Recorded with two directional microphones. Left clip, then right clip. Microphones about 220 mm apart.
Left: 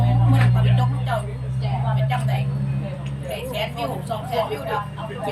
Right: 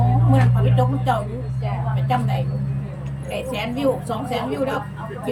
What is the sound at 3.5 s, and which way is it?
A woman's voice, 40° right (ahead or behind).